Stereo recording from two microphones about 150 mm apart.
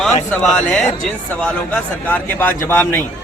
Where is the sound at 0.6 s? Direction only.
5° left (ahead or behind).